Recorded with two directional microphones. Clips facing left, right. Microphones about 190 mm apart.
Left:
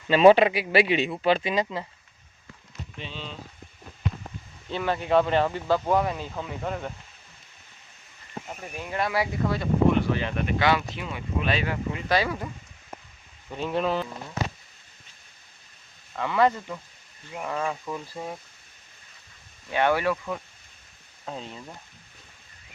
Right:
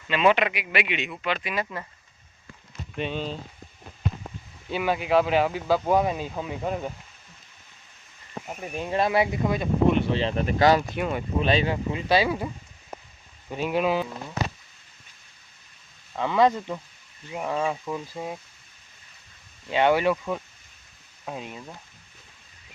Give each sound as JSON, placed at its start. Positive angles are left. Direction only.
{"t": 0.1, "sound": "speech", "side_deg": 35}
{"t": 3.0, "sound": "speech", "side_deg": -55}
{"t": 4.7, "sound": "speech", "side_deg": -10}
{"t": 8.4, "sound": "speech", "side_deg": -20}
{"t": 10.9, "sound": "speech", "side_deg": -55}
{"t": 11.3, "sound": "speech", "side_deg": -30}
{"t": 13.5, "sound": "speech", "side_deg": -10}
{"t": 16.1, "sound": "speech", "side_deg": -15}
{"t": 19.7, "sound": "speech", "side_deg": -20}